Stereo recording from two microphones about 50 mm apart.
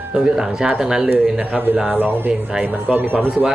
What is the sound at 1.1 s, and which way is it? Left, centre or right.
A man's voice, right.